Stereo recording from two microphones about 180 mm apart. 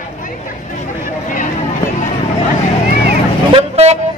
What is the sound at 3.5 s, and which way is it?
Vehicle, 35° right (ahead or behind).